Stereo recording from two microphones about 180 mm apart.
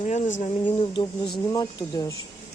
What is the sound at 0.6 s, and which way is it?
Speech, 25° left (ahead or behind).